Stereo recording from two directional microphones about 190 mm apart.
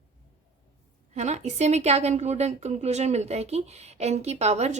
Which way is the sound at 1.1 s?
35° right (ahead or behind).